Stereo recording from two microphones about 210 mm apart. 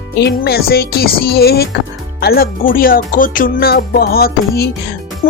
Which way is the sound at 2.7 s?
45° left (ahead or behind).